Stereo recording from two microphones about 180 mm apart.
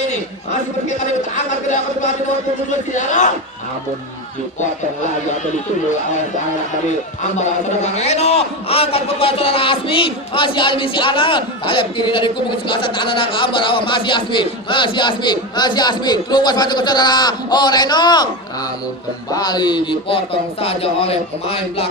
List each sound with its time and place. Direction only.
0.1 s speech: 40° left (ahead or behind)
2.9 s speech: 40° left (ahead or behind)
7.3 s a man's voice: 40° left (ahead or behind)
19.3 s speech: 25° left (ahead or behind)